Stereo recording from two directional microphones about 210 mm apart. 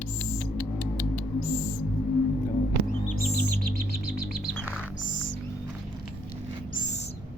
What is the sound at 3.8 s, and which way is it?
Chirp, 50° right (ahead or behind).